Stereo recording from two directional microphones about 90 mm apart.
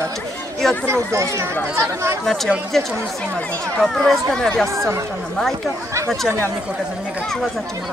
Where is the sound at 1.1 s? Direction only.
30° right (ahead or behind).